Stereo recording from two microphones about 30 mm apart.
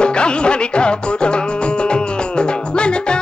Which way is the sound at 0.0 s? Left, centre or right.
Left.